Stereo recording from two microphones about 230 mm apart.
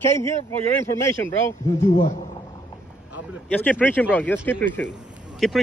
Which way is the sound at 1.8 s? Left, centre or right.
Left.